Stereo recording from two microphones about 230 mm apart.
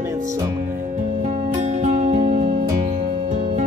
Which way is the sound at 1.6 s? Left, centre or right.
Right.